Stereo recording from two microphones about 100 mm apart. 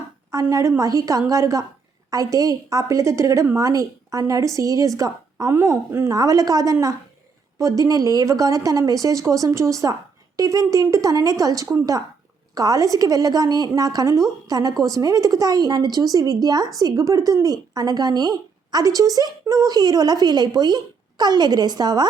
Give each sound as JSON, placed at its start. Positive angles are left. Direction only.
{"t": 0.3, "sound": "a woman's voice", "side_deg": -35}
{"t": 5.5, "sound": "a woman's voice", "side_deg": -25}
{"t": 6.1, "sound": "a woman's voice", "side_deg": -35}